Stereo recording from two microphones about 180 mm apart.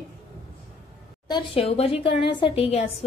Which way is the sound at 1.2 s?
25° left (ahead or behind).